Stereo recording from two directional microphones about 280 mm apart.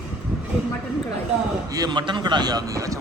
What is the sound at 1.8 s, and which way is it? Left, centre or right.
A man's voice, centre.